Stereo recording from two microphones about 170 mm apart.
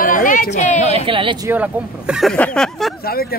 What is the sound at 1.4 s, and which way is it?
Speech, 10° right (ahead or behind).